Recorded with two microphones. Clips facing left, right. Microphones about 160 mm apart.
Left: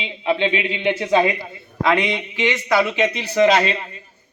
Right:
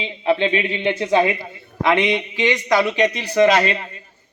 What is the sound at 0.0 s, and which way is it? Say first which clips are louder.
Speech: right 2 dB; 15° left (ahead or behind).